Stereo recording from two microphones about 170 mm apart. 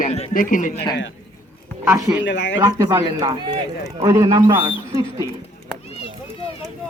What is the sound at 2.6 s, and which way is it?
Speech, 15° right (ahead or behind).